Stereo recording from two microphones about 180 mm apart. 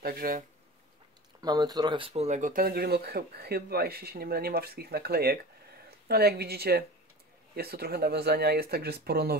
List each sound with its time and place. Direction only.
0.0 s speech: 55° right (ahead or behind)
1.4 s speech: 20° right (ahead or behind); by 9.3 s 60° right (ahead or behind)